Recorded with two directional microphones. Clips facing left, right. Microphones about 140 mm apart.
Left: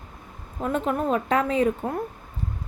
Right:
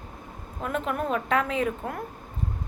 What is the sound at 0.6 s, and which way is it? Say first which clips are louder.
A woman's voice: left 4 dB; 35° left (ahead or behind).